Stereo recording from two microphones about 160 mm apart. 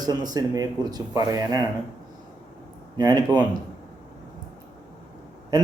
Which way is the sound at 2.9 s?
25° right (ahead or behind).